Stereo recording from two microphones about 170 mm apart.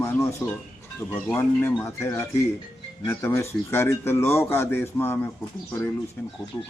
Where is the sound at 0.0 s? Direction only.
15° left (ahead or behind).